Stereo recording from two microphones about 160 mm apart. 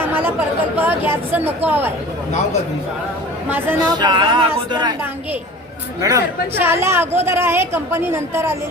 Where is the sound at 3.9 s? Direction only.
25° right (ahead or behind).